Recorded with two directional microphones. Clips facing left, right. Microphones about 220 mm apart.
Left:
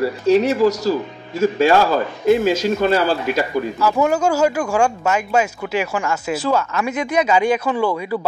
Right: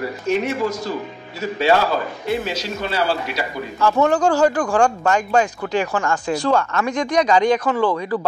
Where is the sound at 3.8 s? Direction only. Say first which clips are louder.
Right 2 dB; 10° left (ahead or behind).